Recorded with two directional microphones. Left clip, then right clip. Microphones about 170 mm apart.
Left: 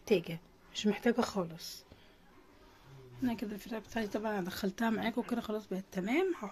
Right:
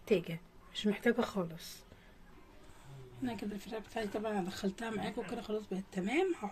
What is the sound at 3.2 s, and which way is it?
Speech, 15° left (ahead or behind).